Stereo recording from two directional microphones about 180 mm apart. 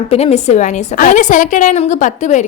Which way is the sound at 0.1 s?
35° left (ahead or behind).